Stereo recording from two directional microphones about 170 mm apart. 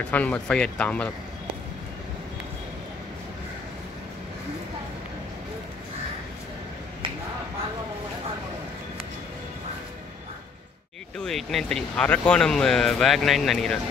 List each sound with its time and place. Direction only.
0.1 s speech: 10° left (ahead or behind)
11.1 s speech: centre (ahead or behind)